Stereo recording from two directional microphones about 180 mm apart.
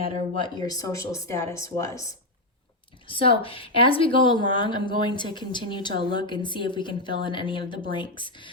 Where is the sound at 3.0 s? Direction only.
30° left (ahead or behind).